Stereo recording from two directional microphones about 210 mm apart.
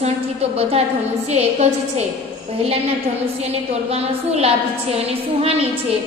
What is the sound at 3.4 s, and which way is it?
A woman's voice, 30° right (ahead or behind).